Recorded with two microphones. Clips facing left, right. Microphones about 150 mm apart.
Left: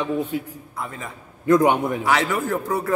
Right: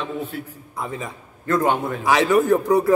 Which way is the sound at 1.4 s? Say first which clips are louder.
Left 3 dB; 15° left (ahead or behind).